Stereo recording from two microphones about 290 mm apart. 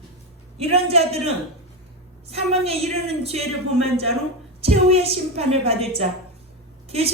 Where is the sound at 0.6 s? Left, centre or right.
Right.